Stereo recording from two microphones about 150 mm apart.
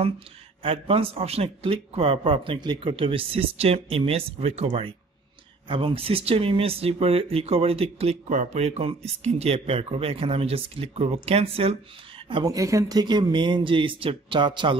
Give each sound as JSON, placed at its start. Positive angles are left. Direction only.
{"t": 0.6, "sound": "a man's voice", "side_deg": -40}
{"t": 8.3, "sound": "a man's voice", "side_deg": -55}
{"t": 12.4, "sound": "a man's voice", "side_deg": -20}